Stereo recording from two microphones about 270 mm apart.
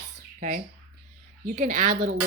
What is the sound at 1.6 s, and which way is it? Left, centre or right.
Speech, right.